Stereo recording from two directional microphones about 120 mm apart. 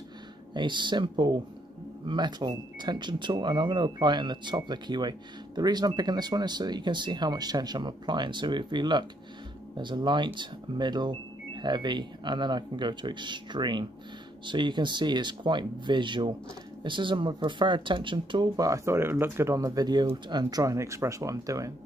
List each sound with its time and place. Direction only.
0.6 s speech: 40° right (ahead or behind)